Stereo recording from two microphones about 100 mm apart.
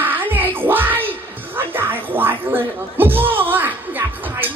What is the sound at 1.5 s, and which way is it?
Music, 20° right (ahead or behind).